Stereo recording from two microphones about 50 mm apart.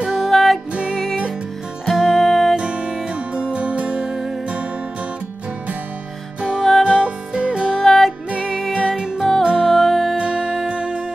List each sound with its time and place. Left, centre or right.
0.0 s music: centre
0.3 s music: centre
1.9 s music: centre
2.5 s music: right
4.0 s music: centre
6.8 s music: centre
7.8 s music: centre
8.7 s music: centre
9.7 s music: centre
10.1 s music: centre